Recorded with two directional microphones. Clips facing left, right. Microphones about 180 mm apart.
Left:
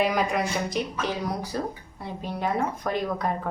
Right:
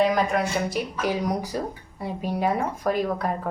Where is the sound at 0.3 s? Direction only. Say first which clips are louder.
Right 2 dB; 5° right (ahead or behind).